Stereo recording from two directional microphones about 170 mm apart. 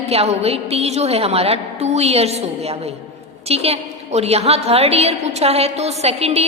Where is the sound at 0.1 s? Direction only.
35° right (ahead or behind).